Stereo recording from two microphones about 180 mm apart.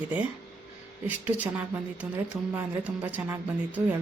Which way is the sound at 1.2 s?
10° right (ahead or behind).